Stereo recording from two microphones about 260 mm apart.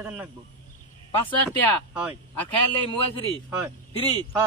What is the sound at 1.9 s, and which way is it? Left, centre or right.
Speech, centre.